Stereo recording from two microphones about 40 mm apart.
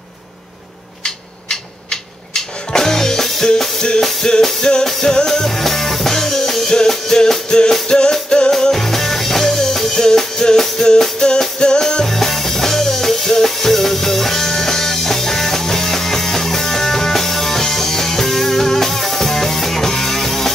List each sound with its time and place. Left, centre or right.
1.0 s music: centre